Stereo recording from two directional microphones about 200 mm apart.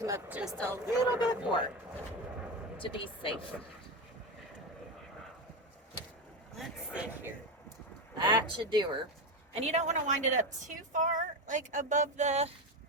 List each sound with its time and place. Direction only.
0.0 s speech: 10° right (ahead or behind)
1.3 s speech: 25° left (ahead or behind)
2.7 s speech: 25° left (ahead or behind)
6.6 s speech: 10° right (ahead or behind)
8.2 s speech: 20° right (ahead or behind)
9.6 s a woman's voice: 35° right (ahead or behind)